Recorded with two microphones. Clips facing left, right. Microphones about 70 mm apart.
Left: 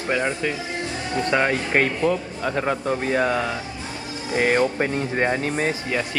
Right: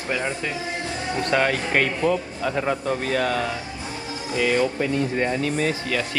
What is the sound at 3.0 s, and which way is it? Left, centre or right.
Speech, left.